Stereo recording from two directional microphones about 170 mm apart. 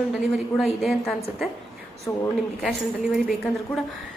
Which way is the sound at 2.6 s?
Centre (ahead or behind).